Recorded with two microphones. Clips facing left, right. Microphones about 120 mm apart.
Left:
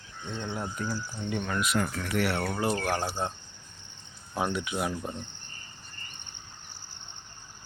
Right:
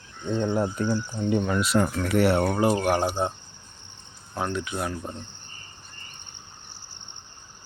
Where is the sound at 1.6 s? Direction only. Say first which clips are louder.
Right 6 dB; 30° right (ahead or behind); by 3.3 s 15° right (ahead or behind).